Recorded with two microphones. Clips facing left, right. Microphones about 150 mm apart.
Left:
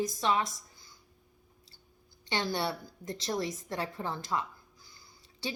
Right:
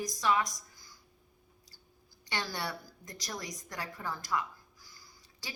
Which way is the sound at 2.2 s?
20° left (ahead or behind).